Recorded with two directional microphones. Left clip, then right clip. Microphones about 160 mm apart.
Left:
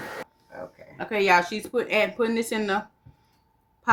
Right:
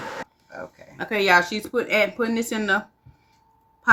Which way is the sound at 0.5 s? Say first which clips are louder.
Right 1 dB; 20° right (ahead or behind).